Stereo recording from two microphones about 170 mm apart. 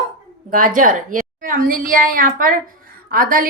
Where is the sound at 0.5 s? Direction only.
55° right (ahead or behind).